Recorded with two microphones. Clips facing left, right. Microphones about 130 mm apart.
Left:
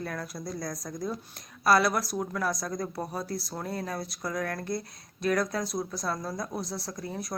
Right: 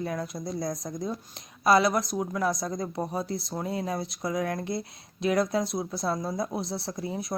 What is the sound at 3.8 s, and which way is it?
Speech, 20° right (ahead or behind).